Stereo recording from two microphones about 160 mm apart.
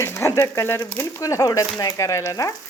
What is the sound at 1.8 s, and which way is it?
Frying, 20° left (ahead or behind).